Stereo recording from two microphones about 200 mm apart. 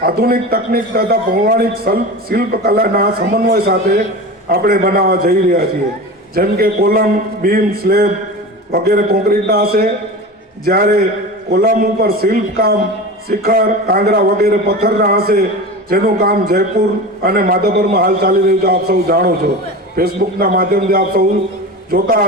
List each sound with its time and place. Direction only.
0.0 s a man's voice: 50° right (ahead or behind)